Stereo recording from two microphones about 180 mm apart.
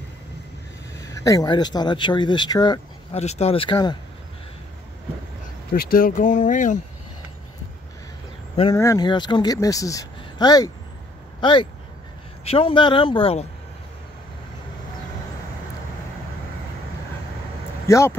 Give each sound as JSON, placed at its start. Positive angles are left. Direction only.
{"t": 1.1, "sound": "speech", "side_deg": 20}
{"t": 3.2, "sound": "speech", "side_deg": 35}
{"t": 5.7, "sound": "speech", "side_deg": 55}
{"t": 8.7, "sound": "speech", "side_deg": 20}
{"t": 12.4, "sound": "speech", "side_deg": 30}
{"t": 17.8, "sound": "speech", "side_deg": 15}